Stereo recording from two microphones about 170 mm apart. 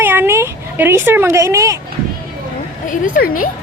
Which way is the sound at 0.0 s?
10° right (ahead or behind).